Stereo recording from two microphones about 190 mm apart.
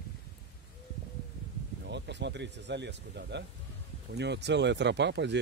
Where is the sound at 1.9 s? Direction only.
65° right (ahead or behind).